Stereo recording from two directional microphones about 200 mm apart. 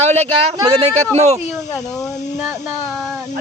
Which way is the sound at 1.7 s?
15° left (ahead or behind).